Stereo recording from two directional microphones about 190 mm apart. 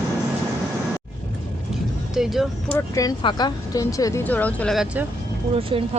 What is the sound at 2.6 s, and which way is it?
Speech, 15° left (ahead or behind).